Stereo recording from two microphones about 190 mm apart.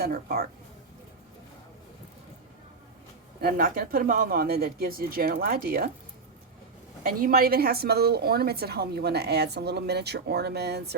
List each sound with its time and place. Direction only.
0.0 s speech: 50° right (ahead or behind)
3.4 s speech: 50° right (ahead or behind)
7.0 s a woman's voice: 50° right (ahead or behind)